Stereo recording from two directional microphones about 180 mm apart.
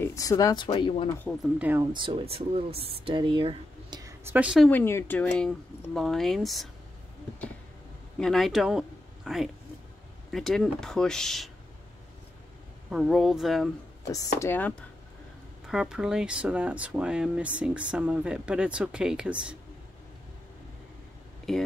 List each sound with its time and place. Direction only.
0.0 s speech: 20° left (ahead or behind)
1.4 s speech: 10° right (ahead or behind)
1.8 s speech: 25° right (ahead or behind)
4.2 s a woman's voice: 10° right (ahead or behind)
4.6 s speech: 10° left (ahead or behind)
8.2 s speech: centre (ahead or behind)
12.9 s speech: centre (ahead or behind)
14.1 s speech: 15° left (ahead or behind)
15.7 s speech: 5° right (ahead or behind)
21.5 s speech: centre (ahead or behind)